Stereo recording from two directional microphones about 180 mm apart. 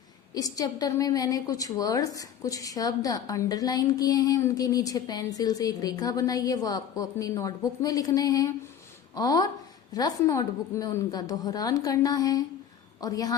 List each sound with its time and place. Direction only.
0.3 s a woman's voice: 20° left (ahead or behind)